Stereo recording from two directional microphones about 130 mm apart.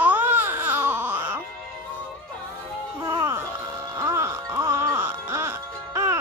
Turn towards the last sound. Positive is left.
turn(degrees=-20)  # may be behind; listen again after turning